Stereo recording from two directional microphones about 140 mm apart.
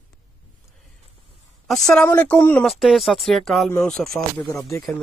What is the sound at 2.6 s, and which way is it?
Speech, centre (ahead or behind).